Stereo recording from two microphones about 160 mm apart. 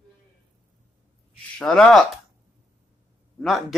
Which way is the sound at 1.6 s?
5° left (ahead or behind).